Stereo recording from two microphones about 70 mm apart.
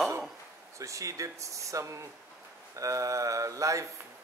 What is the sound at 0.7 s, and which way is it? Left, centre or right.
Speech, right.